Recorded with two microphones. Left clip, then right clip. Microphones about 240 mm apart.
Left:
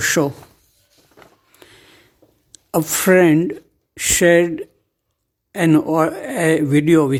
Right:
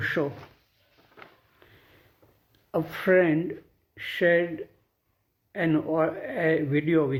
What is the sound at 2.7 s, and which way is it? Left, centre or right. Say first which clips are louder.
Speech: left 8 dB; left.